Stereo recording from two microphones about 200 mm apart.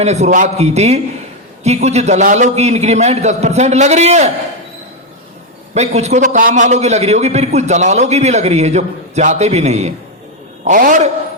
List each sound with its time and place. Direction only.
0.0 s a man's voice: 35° right (ahead or behind)
5.7 s a man's voice: 35° right (ahead or behind)